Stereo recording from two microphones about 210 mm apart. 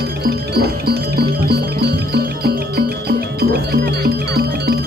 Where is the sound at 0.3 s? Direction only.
50° right (ahead or behind).